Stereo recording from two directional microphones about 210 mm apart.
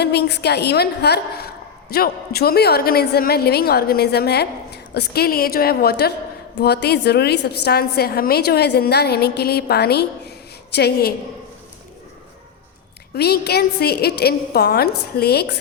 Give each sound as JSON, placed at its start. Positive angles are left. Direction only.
{"t": 0.0, "sound": "a woman's voice", "side_deg": 50}
{"t": 13.1, "sound": "a woman's voice", "side_deg": 50}